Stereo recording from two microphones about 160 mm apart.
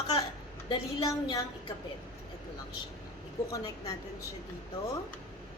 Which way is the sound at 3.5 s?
25° left (ahead or behind).